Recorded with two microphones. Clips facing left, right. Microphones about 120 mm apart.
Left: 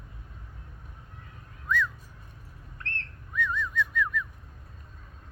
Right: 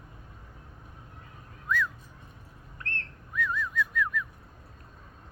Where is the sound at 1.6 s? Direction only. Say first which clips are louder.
Left 1 dB; 5° right (ahead or behind).